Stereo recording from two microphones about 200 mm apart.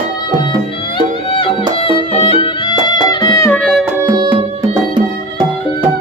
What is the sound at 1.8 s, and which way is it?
Music, 25° left (ahead or behind).